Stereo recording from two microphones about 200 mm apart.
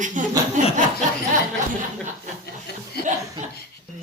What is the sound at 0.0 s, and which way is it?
Speech, 40° right (ahead or behind).